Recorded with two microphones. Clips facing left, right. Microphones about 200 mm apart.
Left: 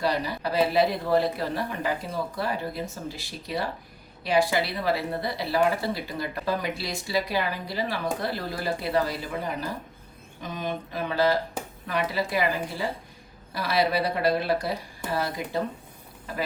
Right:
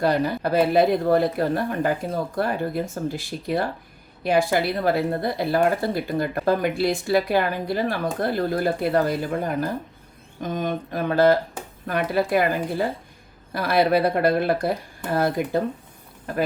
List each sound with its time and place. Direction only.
0.0 s speech: 50° right (ahead or behind)